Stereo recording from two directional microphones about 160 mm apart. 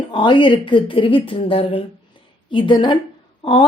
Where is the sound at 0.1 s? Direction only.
30° left (ahead or behind).